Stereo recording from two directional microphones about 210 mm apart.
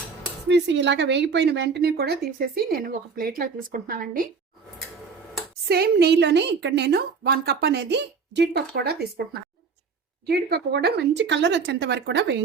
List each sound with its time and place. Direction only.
0.4 s a woman's voice: 55° right (ahead or behind); by 4.3 s 40° right (ahead or behind)
5.6 s a woman's voice: 50° right (ahead or behind)
10.2 s speech: 50° right (ahead or behind)